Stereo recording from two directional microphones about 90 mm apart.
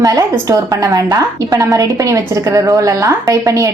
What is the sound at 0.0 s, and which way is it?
A woman's voice, 40° right (ahead or behind).